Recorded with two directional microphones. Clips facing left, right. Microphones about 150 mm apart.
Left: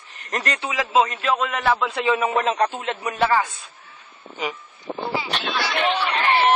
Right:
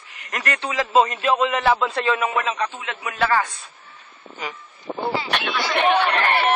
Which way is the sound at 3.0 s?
25° left (ahead or behind).